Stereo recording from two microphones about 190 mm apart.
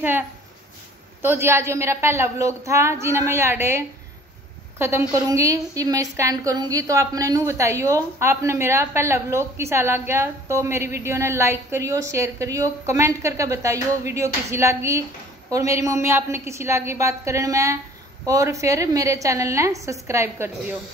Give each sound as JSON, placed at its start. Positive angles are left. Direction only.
{"t": 1.2, "sound": "a woman's voice", "side_deg": -10}